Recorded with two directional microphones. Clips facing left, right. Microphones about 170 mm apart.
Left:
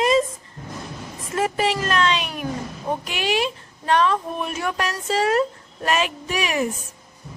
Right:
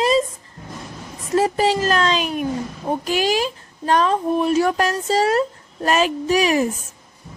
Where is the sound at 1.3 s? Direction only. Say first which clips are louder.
Right 5 dB; 35° right (ahead or behind).